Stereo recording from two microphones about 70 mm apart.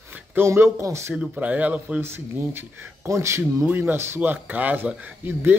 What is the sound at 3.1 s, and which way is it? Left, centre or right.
Speech, right.